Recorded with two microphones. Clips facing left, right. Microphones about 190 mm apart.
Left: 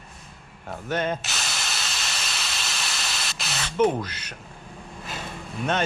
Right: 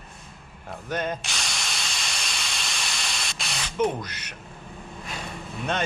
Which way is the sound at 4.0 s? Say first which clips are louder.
Left 4 dB; 30° left (ahead or behind).